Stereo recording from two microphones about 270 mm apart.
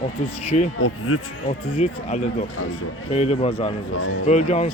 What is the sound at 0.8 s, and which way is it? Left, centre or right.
Speech, left.